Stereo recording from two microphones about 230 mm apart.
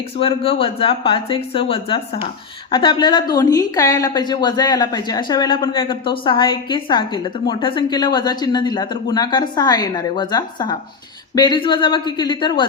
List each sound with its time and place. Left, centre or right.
0.2 s a woman's voice: left
2.6 s a woman's voice: left